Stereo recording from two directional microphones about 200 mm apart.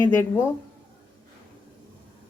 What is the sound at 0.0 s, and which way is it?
Speech, 15° left (ahead or behind).